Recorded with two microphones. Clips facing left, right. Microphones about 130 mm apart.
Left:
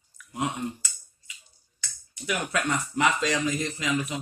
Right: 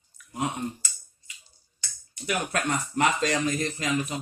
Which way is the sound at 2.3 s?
45° right (ahead or behind).